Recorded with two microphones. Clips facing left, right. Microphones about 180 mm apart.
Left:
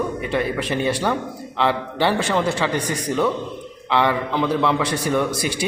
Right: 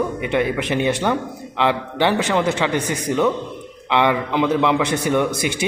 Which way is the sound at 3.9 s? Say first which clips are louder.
Right 2 dB; 20° right (ahead or behind).